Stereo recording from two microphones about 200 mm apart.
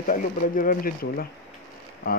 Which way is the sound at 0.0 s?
45° left (ahead or behind).